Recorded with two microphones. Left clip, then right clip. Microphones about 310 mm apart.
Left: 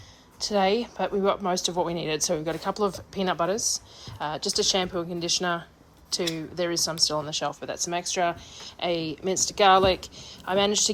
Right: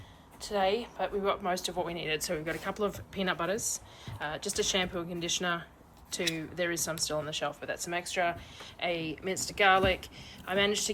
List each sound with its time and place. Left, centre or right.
0.3 s speech: centre